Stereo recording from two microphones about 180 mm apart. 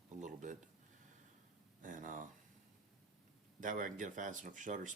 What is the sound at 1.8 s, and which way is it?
Speech, 45° right (ahead or behind).